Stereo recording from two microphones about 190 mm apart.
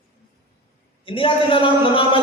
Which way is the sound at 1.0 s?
30° left (ahead or behind).